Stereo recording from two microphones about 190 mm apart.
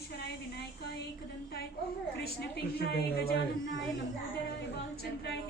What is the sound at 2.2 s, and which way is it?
A woman's voice, 55° left (ahead or behind).